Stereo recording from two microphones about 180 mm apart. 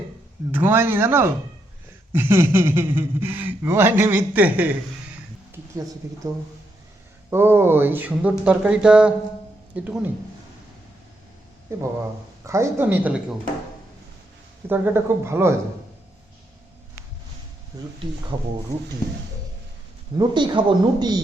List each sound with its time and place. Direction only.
0.5 s a man's voice: 10° right (ahead or behind)
6.0 s a man's voice: 15° right (ahead or behind)
7.3 s a man's voice: 10° right (ahead or behind)
11.7 s a man's voice: 15° right (ahead or behind)
14.7 s a man's voice: 10° right (ahead or behind)
17.7 s a man's voice: 20° right (ahead or behind)
20.1 s speech: 25° right (ahead or behind)